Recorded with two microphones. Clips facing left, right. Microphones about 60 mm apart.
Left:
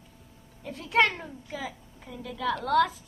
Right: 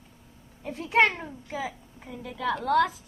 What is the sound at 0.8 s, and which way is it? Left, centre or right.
A child's voice, centre.